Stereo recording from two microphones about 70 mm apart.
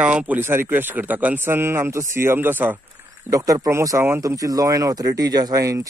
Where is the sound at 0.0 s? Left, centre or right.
Centre.